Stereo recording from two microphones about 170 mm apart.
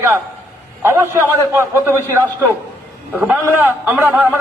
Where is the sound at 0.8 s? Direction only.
15° right (ahead or behind).